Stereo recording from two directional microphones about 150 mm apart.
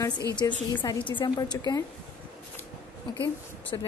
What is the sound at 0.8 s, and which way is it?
A woman's voice, 35° left (ahead or behind).